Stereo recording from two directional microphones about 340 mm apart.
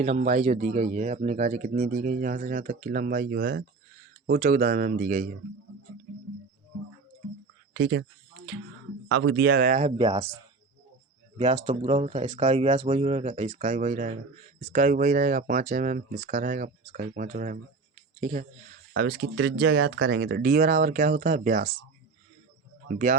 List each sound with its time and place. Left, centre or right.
0.0 s speech: centre
7.7 s speech: right
9.0 s speech: right